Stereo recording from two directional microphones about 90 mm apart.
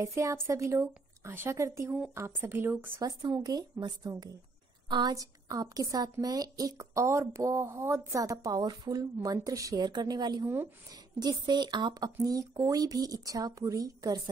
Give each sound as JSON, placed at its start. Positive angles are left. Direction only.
{"t": 0.0, "sound": "speech", "side_deg": -35}
{"t": 3.0, "sound": "a woman's voice", "side_deg": -45}
{"t": 5.1, "sound": "speech", "side_deg": -40}
{"t": 9.8, "sound": "speech", "side_deg": -50}
{"t": 10.4, "sound": "speech", "side_deg": -30}
{"t": 10.9, "sound": "speech", "side_deg": -50}